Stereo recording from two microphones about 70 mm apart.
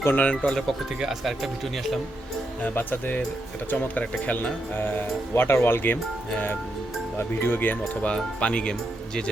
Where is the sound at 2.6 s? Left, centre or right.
Left.